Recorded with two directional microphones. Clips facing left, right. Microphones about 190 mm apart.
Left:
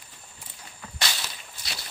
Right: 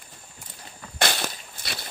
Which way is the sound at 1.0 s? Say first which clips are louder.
Right 8 dB; 55° right (ahead or behind).